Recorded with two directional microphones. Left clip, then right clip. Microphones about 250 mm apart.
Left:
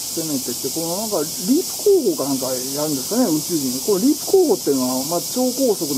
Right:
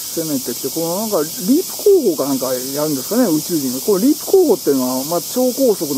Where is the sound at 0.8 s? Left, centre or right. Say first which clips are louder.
Right 5 dB; centre.